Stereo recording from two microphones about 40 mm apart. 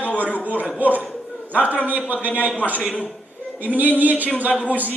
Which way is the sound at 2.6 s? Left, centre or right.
Left.